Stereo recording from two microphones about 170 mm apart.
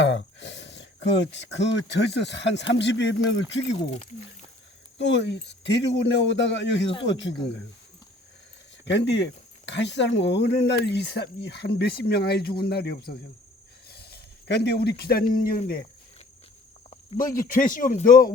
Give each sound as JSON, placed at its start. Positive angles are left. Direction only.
{"t": 0.0, "sound": "speech", "side_deg": 90}
{"t": 4.9, "sound": "speech", "side_deg": 90}
{"t": 8.8, "sound": "speech", "side_deg": 90}
{"t": 16.9, "sound": "speech", "side_deg": 50}